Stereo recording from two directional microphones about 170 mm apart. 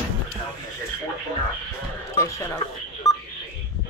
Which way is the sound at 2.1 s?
20° left (ahead or behind).